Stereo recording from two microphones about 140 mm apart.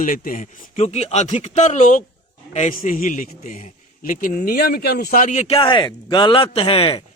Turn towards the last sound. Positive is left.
turn(degrees=45)  # may be behind; listen again after turning